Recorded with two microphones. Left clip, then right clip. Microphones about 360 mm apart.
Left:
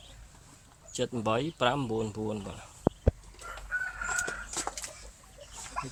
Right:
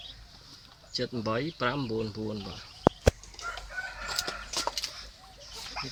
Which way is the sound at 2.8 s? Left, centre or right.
Right.